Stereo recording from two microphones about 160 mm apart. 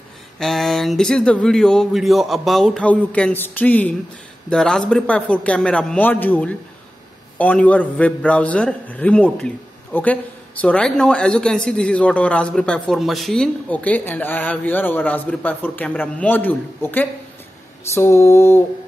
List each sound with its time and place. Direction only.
0.4 s speech: centre (ahead or behind); by 18.6 s 15° left (ahead or behind)